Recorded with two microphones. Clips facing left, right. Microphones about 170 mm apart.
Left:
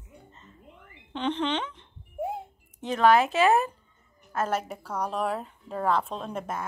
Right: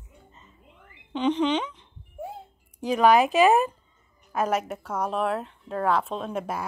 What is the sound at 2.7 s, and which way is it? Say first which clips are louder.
A woman's voice: right 2 dB; 15° right (ahead or behind).